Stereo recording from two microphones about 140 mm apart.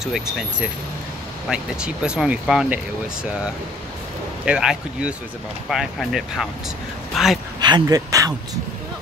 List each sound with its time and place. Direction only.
0.0 s speech: 5° right (ahead or behind)
4.5 s speech: 5° right (ahead or behind)
7.6 s speech: 30° right (ahead or behind)